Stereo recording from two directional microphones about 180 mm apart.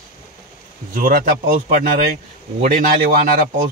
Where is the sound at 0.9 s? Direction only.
45° right (ahead or behind).